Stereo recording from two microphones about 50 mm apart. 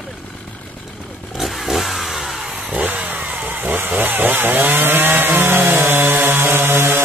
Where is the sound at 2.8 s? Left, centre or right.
Right.